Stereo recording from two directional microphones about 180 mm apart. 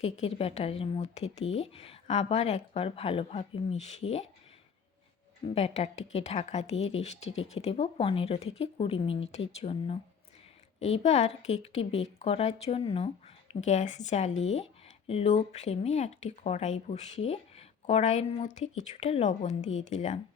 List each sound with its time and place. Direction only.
0.0 s speech: 35° left (ahead or behind)
5.5 s speech: 35° left (ahead or behind)